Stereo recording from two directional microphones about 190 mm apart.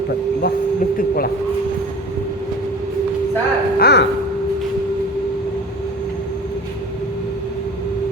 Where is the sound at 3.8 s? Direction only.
55° left (ahead or behind).